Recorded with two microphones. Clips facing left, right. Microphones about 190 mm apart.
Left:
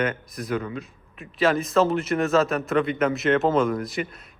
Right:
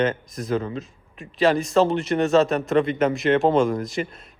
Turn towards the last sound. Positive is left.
turn(degrees=0)  # may be behind; listen again after turning